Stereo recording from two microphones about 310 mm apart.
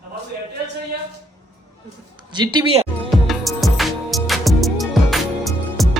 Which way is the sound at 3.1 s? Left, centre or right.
Centre.